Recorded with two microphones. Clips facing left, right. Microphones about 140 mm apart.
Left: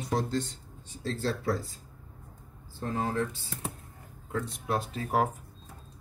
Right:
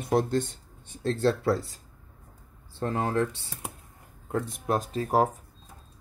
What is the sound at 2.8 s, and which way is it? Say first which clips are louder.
Speech: right 4 dB; 65° right (ahead or behind).